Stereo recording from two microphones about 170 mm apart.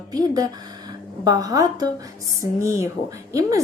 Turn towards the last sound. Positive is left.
turn(degrees=-20)  # may be behind; listen again after turning